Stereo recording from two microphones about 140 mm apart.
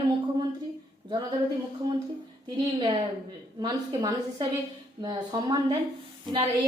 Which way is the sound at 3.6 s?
30° right (ahead or behind).